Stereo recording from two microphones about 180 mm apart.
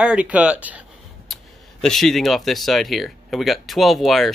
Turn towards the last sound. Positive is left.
turn(degrees=0)  # may be behind; listen again after turning